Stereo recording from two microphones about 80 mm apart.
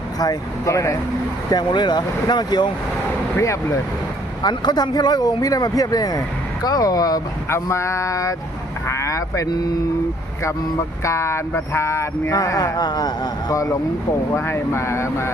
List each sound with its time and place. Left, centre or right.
0.2 s speech: left
1.5 s speech: left
3.3 s speech: left
4.4 s speech: left
5.4 s speech: left
7.5 s speech: left
11.0 s speech: left
12.4 s speech: left
14.3 s speech: left